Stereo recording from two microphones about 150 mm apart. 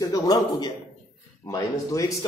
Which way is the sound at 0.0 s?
25° left (ahead or behind).